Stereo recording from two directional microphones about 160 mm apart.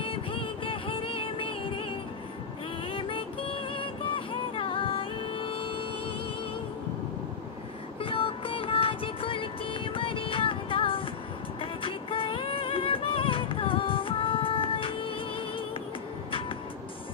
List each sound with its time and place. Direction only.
0.0 s music: 35° left (ahead or behind)
8.0 s music: 35° left (ahead or behind)